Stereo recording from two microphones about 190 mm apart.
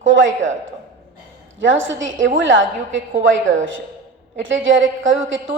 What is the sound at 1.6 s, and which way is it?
A woman's voice, 90° right.